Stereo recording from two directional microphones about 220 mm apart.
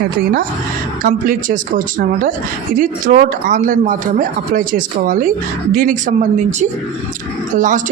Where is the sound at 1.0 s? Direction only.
40° right (ahead or behind).